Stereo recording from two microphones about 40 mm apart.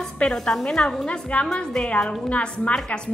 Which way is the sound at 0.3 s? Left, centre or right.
Centre.